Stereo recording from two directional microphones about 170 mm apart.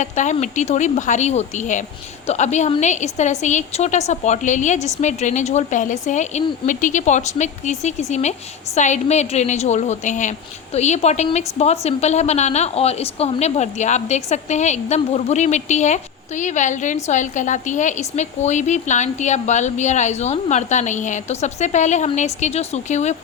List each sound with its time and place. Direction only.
0.0 s a woman's voice: 45° left (ahead or behind)